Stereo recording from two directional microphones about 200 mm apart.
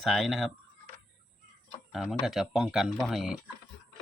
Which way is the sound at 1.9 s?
Centre (ahead or behind).